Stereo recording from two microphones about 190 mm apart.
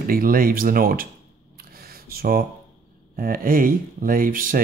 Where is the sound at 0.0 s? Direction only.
50° right (ahead or behind).